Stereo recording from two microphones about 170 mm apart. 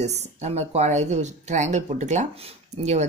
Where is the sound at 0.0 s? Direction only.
40° right (ahead or behind).